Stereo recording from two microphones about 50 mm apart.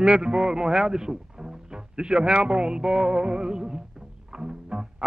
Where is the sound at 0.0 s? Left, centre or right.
Centre.